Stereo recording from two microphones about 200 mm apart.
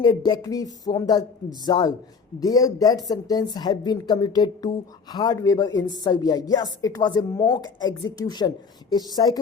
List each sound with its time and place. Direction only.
0.0 s speech: 20° left (ahead or behind)